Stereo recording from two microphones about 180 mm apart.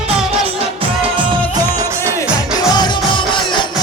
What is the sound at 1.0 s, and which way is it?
Music, 25° right (ahead or behind).